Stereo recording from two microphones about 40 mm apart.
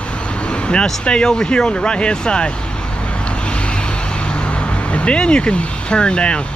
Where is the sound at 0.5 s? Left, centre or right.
Left.